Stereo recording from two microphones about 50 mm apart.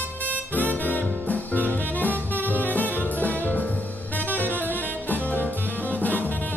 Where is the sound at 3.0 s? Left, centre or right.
Left.